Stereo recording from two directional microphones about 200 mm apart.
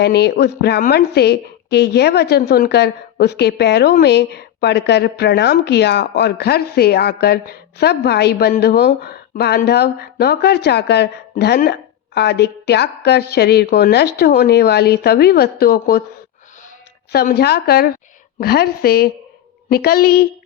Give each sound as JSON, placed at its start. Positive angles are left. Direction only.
{"t": 0.0, "sound": "a woman's voice", "side_deg": 55}
{"t": 17.1, "sound": "speech", "side_deg": 50}